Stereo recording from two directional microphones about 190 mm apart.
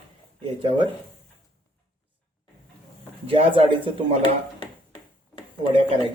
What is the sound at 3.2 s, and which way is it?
Speech, 25° right (ahead or behind).